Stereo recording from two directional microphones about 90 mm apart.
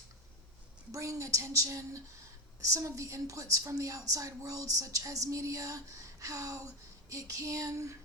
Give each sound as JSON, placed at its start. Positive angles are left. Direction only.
{"t": 0.9, "sound": "a woman's voice", "side_deg": -35}